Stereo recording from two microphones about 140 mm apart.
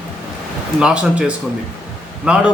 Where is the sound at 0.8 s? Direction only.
5° right (ahead or behind).